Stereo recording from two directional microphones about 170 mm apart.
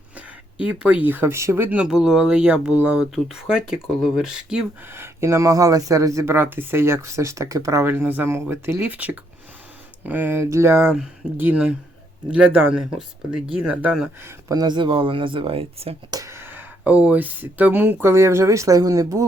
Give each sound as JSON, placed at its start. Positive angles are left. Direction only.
{"t": 0.6, "sound": "speech", "side_deg": -5}
{"t": 14.3, "sound": "speech", "side_deg": -20}
{"t": 16.1, "sound": "speech", "side_deg": -15}